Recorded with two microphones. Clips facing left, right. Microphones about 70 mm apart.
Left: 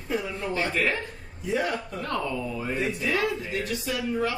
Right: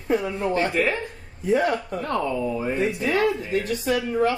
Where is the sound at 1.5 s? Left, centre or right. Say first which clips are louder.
Right 6 dB; right.